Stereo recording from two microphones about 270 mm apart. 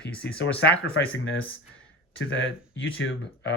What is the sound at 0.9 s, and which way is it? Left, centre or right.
Speech, left.